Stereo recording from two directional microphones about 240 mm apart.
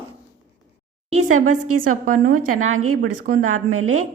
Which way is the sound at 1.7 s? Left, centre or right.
Right.